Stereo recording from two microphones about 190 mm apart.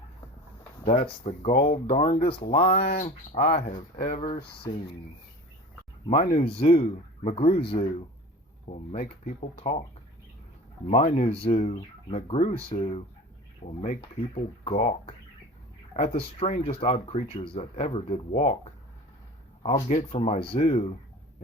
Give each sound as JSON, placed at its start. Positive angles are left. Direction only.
{"t": 0.9, "sound": "speech", "side_deg": 35}
{"t": 3.9, "sound": "speech", "side_deg": 40}
{"t": 6.1, "sound": "speech", "side_deg": 35}
{"t": 8.6, "sound": "speech", "side_deg": 40}
{"t": 10.8, "sound": "speech", "side_deg": 35}
{"t": 19.6, "sound": "speech", "side_deg": 35}